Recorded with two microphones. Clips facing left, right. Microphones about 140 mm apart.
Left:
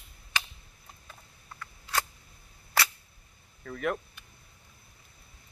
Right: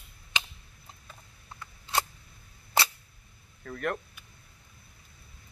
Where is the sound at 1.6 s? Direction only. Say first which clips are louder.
Right 2 dB; 25° right (ahead or behind).